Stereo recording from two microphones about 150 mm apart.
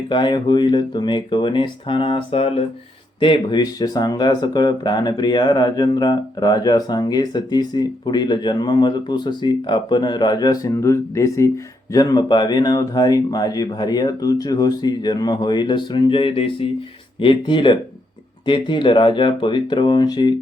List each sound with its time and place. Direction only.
0.1 s speech: 30° left (ahead or behind)